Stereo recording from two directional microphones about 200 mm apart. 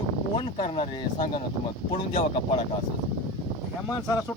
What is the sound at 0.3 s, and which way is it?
Speech, 30° left (ahead or behind).